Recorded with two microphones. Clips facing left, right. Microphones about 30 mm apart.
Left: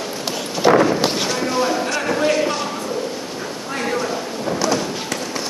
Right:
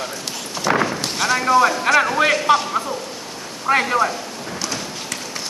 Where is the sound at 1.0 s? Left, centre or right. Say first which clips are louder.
Left 2 dB; centre.